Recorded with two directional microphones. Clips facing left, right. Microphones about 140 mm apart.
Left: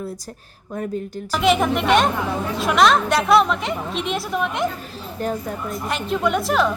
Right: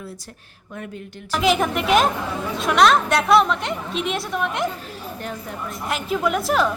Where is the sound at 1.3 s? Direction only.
Centre (ahead or behind).